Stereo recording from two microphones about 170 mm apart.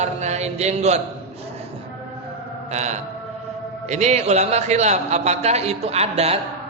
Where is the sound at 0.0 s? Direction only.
40° right (ahead or behind).